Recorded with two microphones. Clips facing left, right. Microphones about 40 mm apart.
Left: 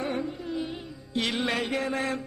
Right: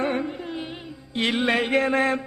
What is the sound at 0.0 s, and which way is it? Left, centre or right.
Carnatic music, right.